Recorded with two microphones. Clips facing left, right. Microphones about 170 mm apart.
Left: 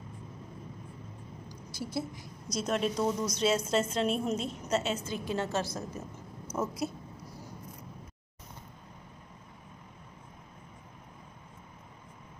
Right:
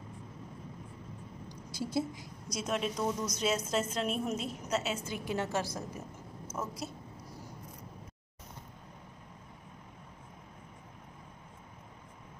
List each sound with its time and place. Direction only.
1.5 s a sound: 20° right (ahead or behind)
2.5 s a woman's voice: 5° right (ahead or behind)
5.0 s a woman's voice: 15° right (ahead or behind)